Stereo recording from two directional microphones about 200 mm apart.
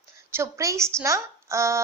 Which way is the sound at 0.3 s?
15° right (ahead or behind).